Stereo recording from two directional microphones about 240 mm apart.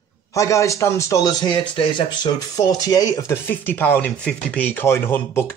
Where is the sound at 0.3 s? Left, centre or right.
Centre.